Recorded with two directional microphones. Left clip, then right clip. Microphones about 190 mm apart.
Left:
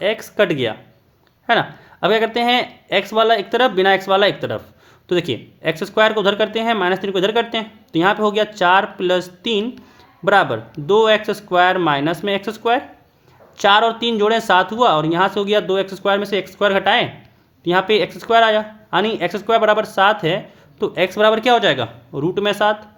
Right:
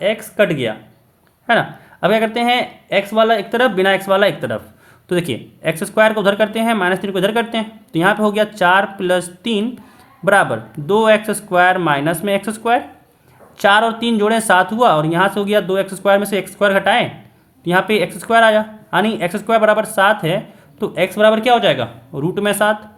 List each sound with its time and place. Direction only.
0.0 s speech: 35° left (ahead or behind)
22.1 s speech: 20° left (ahead or behind)